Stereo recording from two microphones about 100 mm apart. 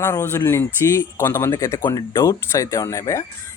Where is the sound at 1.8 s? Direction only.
50° left (ahead or behind).